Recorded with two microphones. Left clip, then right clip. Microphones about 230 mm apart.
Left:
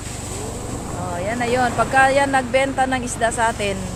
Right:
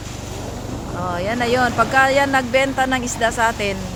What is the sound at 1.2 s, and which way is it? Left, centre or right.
Speech, centre.